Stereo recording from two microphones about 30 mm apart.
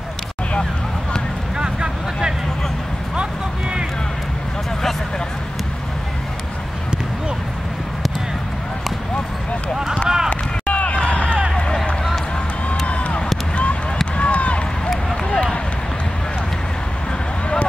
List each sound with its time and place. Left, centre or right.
10.0 s run: centre
10.7 s run: left
12.8 s a sound: left
14.1 s run: left